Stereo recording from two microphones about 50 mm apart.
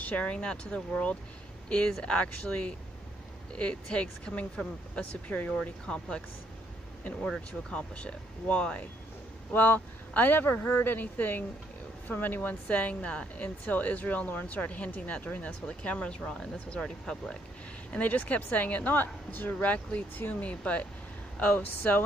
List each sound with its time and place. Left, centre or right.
0.0 s speech: left
0.4 s speech: centre
7.2 s speech: centre
7.7 s speech: left
9.5 s speech: left; by 17.4 s centre
17.9 s speech: left